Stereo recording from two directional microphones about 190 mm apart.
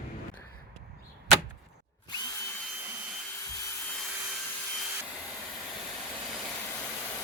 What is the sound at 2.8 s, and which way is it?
Jet engine, 10° right (ahead or behind).